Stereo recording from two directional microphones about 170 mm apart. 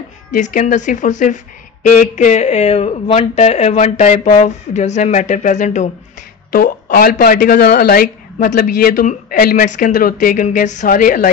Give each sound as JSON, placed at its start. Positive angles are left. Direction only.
{"t": 0.3, "sound": "speech", "side_deg": 50}
{"t": 6.5, "sound": "speech", "side_deg": 60}